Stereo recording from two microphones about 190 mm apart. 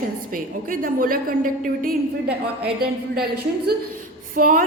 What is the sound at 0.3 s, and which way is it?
A woman's voice, 45° right (ahead or behind).